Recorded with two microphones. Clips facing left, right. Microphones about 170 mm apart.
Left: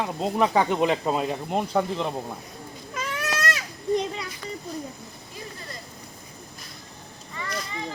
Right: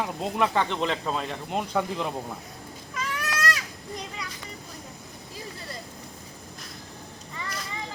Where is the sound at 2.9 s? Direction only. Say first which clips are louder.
Left 2 dB; 25° left (ahead or behind).